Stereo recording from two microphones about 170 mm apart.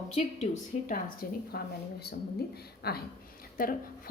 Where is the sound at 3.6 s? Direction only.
55° left (ahead or behind).